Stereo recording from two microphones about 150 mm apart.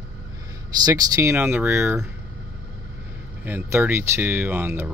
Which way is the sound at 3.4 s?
15° right (ahead or behind).